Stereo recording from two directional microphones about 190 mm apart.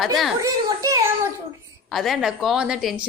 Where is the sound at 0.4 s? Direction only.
15° right (ahead or behind).